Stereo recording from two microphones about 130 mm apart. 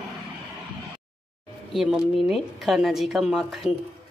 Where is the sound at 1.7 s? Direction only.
Centre (ahead or behind).